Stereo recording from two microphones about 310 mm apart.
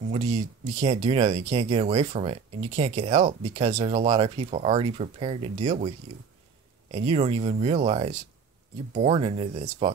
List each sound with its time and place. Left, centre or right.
0.1 s speech: right